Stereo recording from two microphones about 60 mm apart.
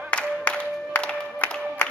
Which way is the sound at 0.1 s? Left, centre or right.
Left.